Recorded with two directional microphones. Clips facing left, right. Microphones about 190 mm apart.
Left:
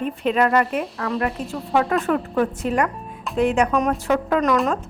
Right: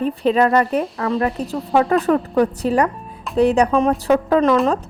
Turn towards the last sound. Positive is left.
turn(degrees=-30)  # may be behind; listen again after turning